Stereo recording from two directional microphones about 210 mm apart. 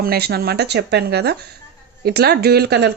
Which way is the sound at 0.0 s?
50° right (ahead or behind).